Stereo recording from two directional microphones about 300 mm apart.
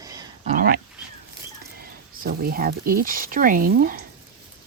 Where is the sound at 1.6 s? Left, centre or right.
Right.